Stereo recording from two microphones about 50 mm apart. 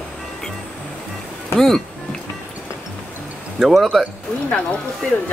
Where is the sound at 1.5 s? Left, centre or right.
Centre.